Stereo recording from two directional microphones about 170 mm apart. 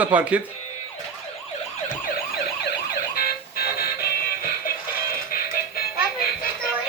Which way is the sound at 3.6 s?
60° left (ahead or behind).